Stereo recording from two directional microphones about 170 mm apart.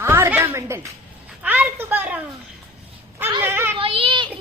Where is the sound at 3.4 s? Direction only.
10° right (ahead or behind).